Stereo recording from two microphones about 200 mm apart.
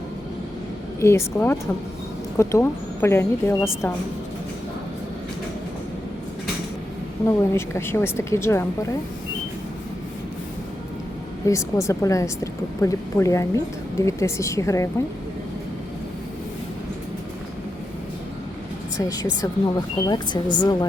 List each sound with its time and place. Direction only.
0.9 s a woman's voice: 15° left (ahead or behind)
7.3 s a woman's voice: 15° left (ahead or behind)
11.4 s a woman's voice: 15° left (ahead or behind)
18.9 s a woman's voice: 15° left (ahead or behind)